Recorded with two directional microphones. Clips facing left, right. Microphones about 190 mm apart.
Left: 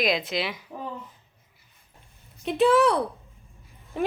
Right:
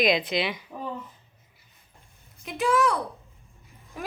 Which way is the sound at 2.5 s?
30° left (ahead or behind).